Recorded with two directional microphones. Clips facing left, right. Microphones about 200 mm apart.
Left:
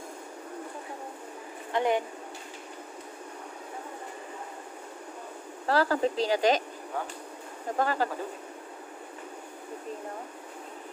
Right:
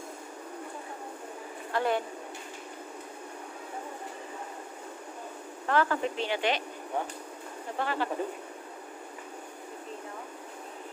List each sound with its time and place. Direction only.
1.7 s speech: 15° left (ahead or behind)
5.7 s speech: 35° left (ahead or behind)
7.7 s speech: 40° left (ahead or behind)